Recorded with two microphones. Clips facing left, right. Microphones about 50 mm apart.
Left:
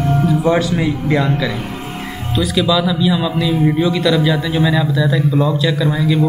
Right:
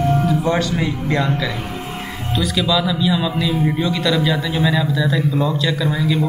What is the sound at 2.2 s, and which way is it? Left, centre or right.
A man's voice, centre.